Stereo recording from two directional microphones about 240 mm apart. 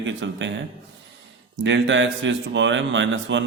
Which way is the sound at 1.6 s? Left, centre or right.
Right.